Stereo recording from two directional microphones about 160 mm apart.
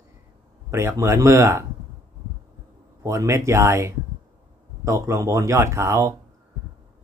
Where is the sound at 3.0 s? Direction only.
15° right (ahead or behind).